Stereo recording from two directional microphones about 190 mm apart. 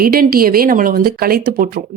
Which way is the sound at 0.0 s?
50° right (ahead or behind).